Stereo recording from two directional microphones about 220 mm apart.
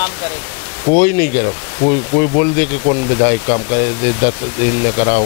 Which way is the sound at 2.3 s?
20° left (ahead or behind).